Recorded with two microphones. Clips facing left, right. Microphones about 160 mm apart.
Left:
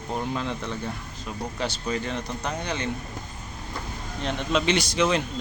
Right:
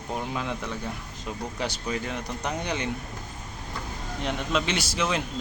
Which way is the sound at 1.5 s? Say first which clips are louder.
Left 3 dB; 15° right (ahead or behind).